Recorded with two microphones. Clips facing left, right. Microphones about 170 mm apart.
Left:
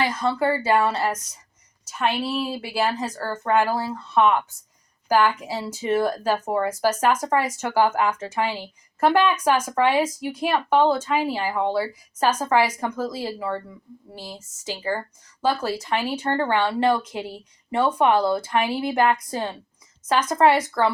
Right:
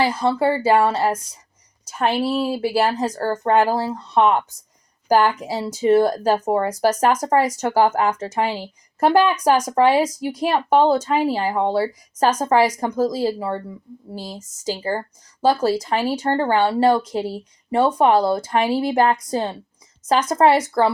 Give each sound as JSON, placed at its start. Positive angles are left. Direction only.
{"t": 0.0, "sound": "speech", "side_deg": -30}